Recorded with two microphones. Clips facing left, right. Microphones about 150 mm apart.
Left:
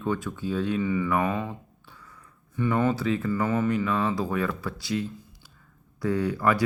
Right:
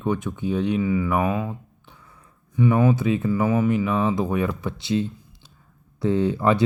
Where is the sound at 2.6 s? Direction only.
15° right (ahead or behind).